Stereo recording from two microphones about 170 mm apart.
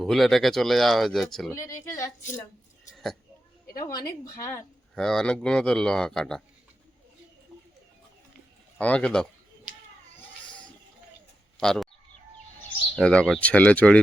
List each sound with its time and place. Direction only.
0.0 s speech: centre (ahead or behind)
1.7 s speech: 15° left (ahead or behind)
2.9 s a sound: centre (ahead or behind)
3.8 s speech: 20° left (ahead or behind)
4.9 s speech: 5° left (ahead or behind)
8.8 s speech: 10° left (ahead or behind)
11.6 s speech: centre (ahead or behind)
13.0 s speech: 5° left (ahead or behind)